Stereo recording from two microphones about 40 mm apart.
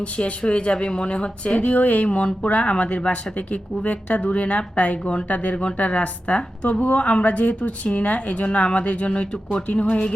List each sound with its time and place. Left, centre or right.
0.0 s speech: left